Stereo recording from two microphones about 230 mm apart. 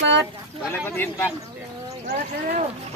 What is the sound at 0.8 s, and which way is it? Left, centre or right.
Speech, centre.